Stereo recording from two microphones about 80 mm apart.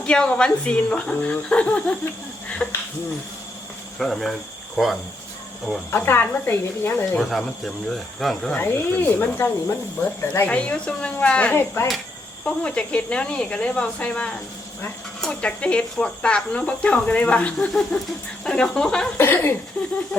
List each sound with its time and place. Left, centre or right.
0.0 s cricket: centre
3.9 s speech: centre
4.8 s cricket: centre
5.9 s a woman's voice: left
7.2 s speech: centre
8.5 s a woman's voice: left
10.5 s cricket: centre
11.5 s a woman's voice: left
12.5 s cricket: centre
19.1 s a woman's voice: left